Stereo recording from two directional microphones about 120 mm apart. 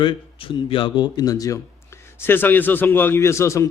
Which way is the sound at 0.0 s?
45° left (ahead or behind).